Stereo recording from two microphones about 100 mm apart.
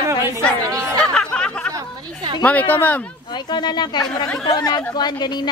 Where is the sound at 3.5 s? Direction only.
45° left (ahead or behind).